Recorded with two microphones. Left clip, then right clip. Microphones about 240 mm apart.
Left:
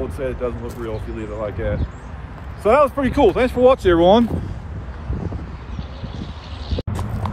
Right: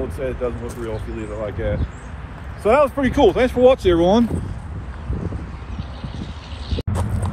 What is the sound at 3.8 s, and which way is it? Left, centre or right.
Speech, left.